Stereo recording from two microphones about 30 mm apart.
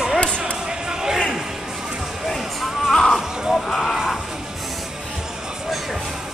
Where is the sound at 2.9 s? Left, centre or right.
Centre.